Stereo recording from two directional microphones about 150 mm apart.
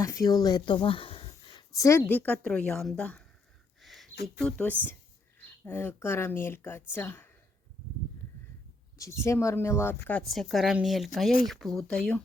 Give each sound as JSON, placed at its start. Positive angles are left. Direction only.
{"t": 0.0, "sound": "speech", "side_deg": 25}
{"t": 3.8, "sound": "a sound", "side_deg": 0}
{"t": 4.4, "sound": "speech", "side_deg": 10}
{"t": 9.0, "sound": "speech", "side_deg": 20}
{"t": 10.1, "sound": "a woman's voice", "side_deg": 5}